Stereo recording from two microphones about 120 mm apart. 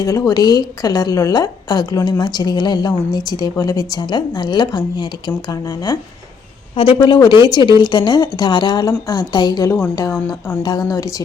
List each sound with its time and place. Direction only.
0.0 s a woman's voice: 30° left (ahead or behind)
6.7 s a woman's voice: 45° left (ahead or behind); by 11.1 s 30° left (ahead or behind)